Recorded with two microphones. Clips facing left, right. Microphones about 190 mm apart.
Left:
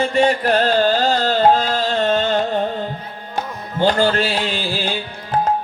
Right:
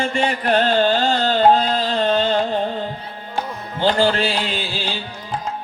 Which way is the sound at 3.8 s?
45° left (ahead or behind).